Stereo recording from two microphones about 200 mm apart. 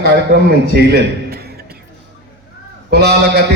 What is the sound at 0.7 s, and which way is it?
Speech, 55° right (ahead or behind).